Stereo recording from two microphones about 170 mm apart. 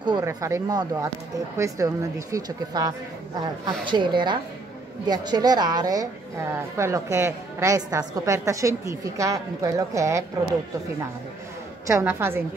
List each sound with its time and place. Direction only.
0.0 s a woman's voice: 20° right (ahead or behind)
11.9 s a woman's voice: 15° right (ahead or behind)